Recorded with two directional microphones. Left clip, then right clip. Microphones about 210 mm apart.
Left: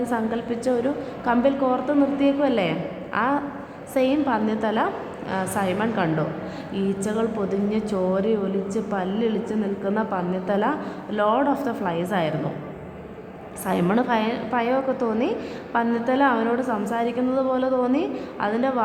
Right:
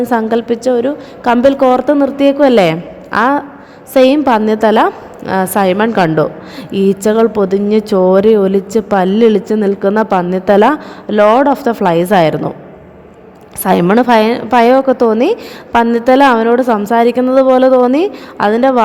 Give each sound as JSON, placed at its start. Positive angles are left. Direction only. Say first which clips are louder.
{"t": 0.1, "sound": "a woman's voice", "louder": "right 13 dB", "side_deg": -45}
{"t": 13.7, "sound": "a woman's voice", "louder": "right 13 dB", "side_deg": -45}